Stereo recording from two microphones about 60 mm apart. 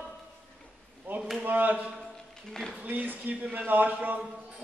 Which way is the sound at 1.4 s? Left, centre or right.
Right.